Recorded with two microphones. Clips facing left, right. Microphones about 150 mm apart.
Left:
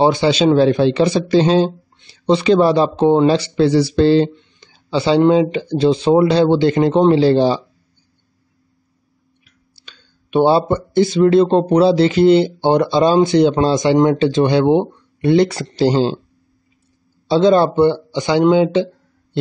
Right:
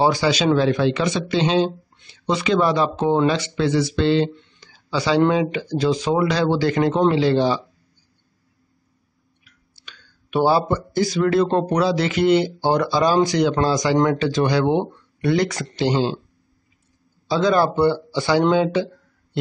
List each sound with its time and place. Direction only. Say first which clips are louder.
0.0 s speech: left 5 dB; 25° left (ahead or behind)
4.6 s speech: left 5 dB; 25° left (ahead or behind)
9.4 s speech: left 2 dB; 25° left (ahead or behind)
17.3 s speech: left 6 dB; 25° left (ahead or behind)